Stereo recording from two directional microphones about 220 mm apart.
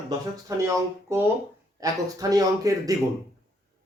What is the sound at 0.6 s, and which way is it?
Speech, 10° right (ahead or behind).